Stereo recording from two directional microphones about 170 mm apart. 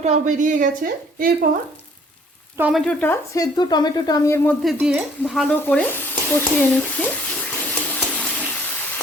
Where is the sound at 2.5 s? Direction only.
5° right (ahead or behind).